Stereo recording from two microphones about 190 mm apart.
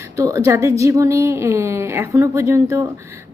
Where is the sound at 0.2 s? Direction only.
15° right (ahead or behind).